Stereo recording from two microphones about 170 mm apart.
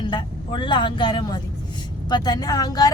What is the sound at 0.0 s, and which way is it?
A woman's voice, 25° left (ahead or behind).